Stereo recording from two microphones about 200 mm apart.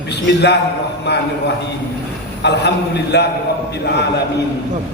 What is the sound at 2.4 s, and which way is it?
Speech, 55° left (ahead or behind).